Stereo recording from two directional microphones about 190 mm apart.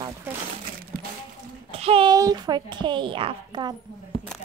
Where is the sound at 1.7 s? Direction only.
30° right (ahead or behind).